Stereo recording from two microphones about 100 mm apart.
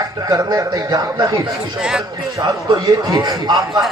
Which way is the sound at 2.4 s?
45° right (ahead or behind).